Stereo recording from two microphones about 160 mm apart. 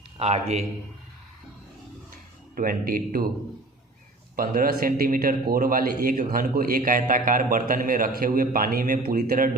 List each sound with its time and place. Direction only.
0.2 s a man's voice: 40° right (ahead or behind)
2.6 s a man's voice: 65° right (ahead or behind)
4.4 s a man's voice: 65° right (ahead or behind)